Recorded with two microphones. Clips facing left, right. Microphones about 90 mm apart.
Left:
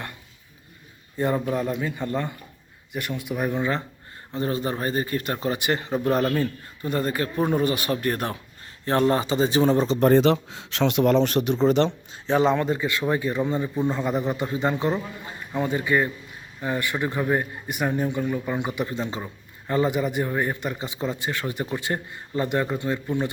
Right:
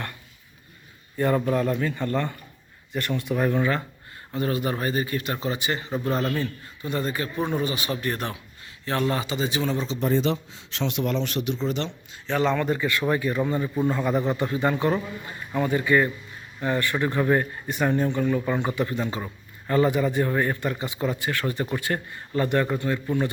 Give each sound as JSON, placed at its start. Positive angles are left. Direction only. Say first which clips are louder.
{"t": 1.1, "sound": "a man's voice", "louder": "right 2 dB", "side_deg": 20}
{"t": 6.3, "sound": "speech", "louder": "left 3 dB", "side_deg": 45}
{"t": 11.0, "sound": "speech", "louder": "left 7 dB", "side_deg": 45}
{"t": 12.3, "sound": "a man's voice", "louder": "left 3 dB", "side_deg": 15}